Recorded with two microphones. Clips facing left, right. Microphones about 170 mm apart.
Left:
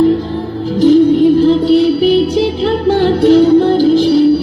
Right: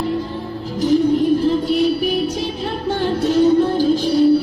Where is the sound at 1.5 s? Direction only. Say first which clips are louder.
Left 7 dB; 80° left.